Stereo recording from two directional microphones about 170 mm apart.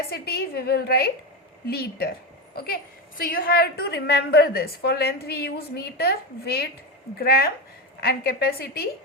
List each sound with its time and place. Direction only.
0.1 s a woman's voice: 70° left (ahead or behind)